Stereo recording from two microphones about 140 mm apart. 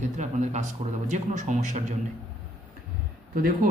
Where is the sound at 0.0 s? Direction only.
60° right (ahead or behind).